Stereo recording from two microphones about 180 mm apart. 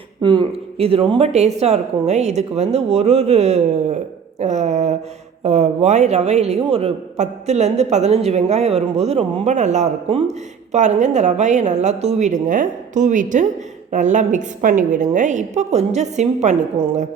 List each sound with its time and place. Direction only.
0.2 s a man's voice: 25° right (ahead or behind)